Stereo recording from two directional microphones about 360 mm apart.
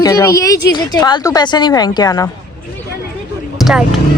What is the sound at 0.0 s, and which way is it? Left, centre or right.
A woman's voice, centre.